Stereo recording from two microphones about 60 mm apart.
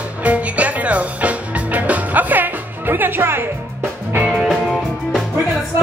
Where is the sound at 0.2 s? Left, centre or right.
Right.